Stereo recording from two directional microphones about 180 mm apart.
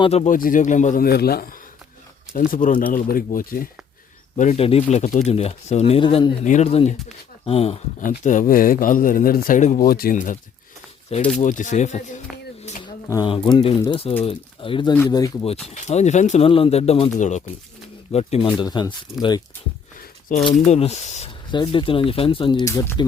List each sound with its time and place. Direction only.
0.0 s speech: 35° left (ahead or behind)
0.3 s speech: 50° left (ahead or behind)
4.4 s speech: 35° left (ahead or behind)
8.2 s speech: 45° left (ahead or behind)
11.3 s speech: 45° left (ahead or behind)
12.8 s a sound: 25° left (ahead or behind)
13.3 s speech: 25° left (ahead or behind)
15.6 s speech: 40° left (ahead or behind); by 18.9 s 25° left (ahead or behind)
20.0 s a sound: 50° left (ahead or behind)
20.7 s speech: 35° left (ahead or behind); by 23.0 s 15° left (ahead or behind)